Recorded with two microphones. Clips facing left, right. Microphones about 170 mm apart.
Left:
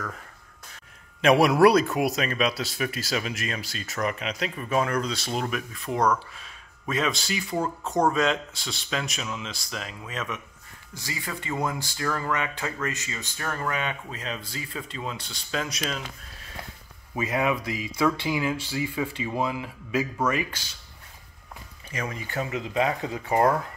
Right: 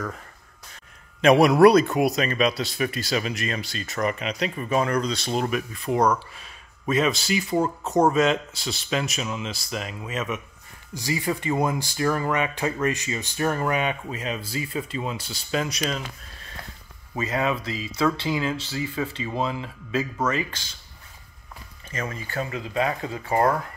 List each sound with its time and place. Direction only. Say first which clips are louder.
1.2 s speech: right 3 dB; 5° left (ahead or behind)
11.0 s speech: right 9 dB; 20° right (ahead or behind); by 16.0 s centre (ahead or behind)
17.1 s speech: even; 15° left (ahead or behind)
21.9 s speech: right 1 dB; 15° left (ahead or behind)